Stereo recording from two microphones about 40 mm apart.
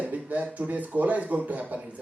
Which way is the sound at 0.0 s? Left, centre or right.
Right.